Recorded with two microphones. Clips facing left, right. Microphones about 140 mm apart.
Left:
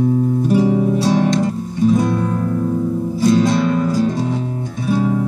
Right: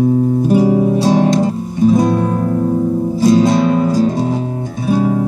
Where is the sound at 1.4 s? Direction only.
35° right (ahead or behind).